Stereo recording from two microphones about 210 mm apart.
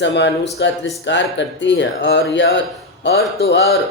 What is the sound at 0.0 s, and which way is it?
Speech, 55° left (ahead or behind).